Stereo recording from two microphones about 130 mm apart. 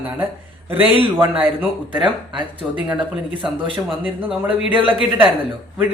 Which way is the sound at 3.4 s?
40° right (ahead or behind).